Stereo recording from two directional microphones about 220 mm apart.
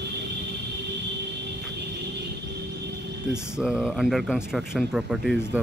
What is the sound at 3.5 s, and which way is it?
Speech, 5° right (ahead or behind).